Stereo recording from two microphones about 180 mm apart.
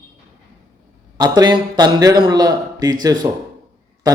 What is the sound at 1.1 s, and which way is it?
A man's voice, 20° right (ahead or behind).